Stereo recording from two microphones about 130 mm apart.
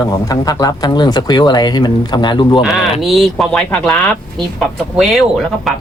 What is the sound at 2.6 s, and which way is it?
Speech, 5° right (ahead or behind).